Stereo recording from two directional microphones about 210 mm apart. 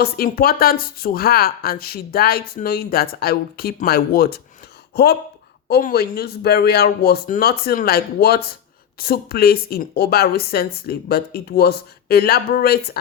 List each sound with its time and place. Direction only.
0.0 s speech: 45° left (ahead or behind)